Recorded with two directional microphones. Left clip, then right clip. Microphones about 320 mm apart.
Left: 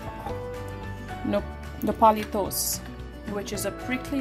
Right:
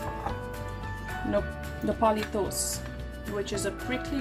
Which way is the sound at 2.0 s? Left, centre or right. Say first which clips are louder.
Left 6 dB; left.